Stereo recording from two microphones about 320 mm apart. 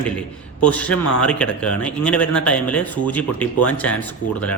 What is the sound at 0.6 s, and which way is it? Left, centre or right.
Speech, centre.